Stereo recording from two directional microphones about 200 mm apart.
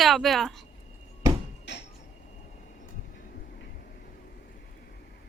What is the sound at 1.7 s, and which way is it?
Train, 60° left (ahead or behind).